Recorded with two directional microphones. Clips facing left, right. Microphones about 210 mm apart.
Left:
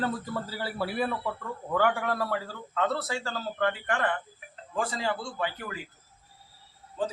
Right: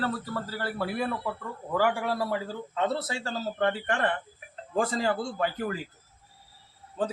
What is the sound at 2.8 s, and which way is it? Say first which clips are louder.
A man's voice: even; 25° right (ahead or behind).